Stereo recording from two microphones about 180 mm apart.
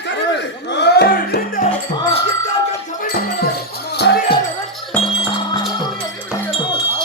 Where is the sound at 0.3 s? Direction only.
75° left (ahead or behind); by 1.7 s 50° left (ahead or behind).